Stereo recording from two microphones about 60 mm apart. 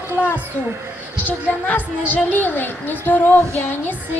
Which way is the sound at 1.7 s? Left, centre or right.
Left.